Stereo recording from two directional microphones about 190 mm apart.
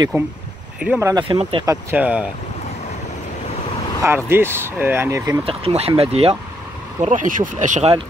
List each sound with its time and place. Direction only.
0.1 s speech: 15° right (ahead or behind)
1.3 s speech: 25° right (ahead or behind)
1.9 s speech: 10° right (ahead or behind)
4.0 s speech: 10° right (ahead or behind)
5.4 s speech: 30° right (ahead or behind)